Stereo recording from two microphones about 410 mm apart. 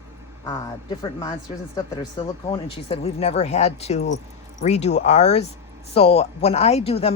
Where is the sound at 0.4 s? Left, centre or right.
Centre.